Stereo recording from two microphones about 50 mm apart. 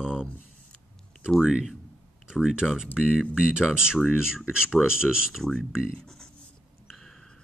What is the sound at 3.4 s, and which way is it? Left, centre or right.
Speech, centre.